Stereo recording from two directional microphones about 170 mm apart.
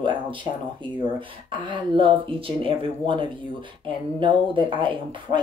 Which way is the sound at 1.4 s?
30° right (ahead or behind).